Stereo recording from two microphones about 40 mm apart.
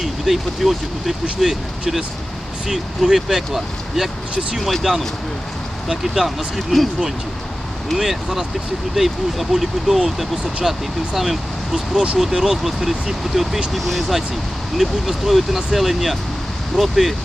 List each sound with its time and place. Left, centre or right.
0.0 s speech: centre
2.6 s speech: centre
5.9 s speech: centre
6.2 s speech: centre
7.9 s speech: centre
11.9 s speech: centre